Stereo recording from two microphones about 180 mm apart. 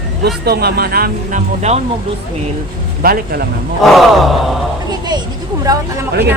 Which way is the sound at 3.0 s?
55° right (ahead or behind).